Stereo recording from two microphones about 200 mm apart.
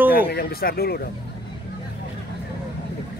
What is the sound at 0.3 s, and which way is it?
Speech, 50° left (ahead or behind).